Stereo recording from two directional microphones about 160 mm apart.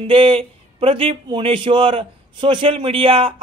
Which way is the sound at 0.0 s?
35° right (ahead or behind).